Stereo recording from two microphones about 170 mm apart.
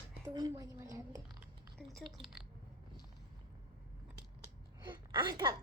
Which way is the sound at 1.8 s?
Centre (ahead or behind).